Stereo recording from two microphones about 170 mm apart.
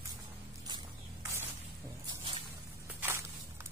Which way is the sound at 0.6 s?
20° right (ahead or behind).